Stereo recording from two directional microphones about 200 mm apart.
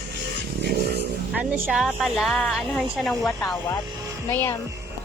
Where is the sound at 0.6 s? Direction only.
50° right (ahead or behind).